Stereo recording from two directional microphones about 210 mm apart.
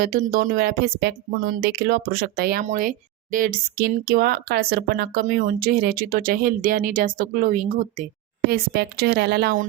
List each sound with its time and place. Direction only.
0.0 s speech: 45° right (ahead or behind)
8.4 s speech: 50° right (ahead or behind)